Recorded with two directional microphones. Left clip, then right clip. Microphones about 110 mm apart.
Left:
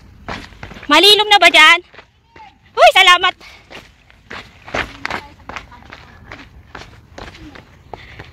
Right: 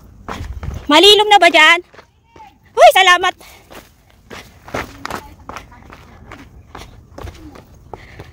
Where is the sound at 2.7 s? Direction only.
70° right (ahead or behind).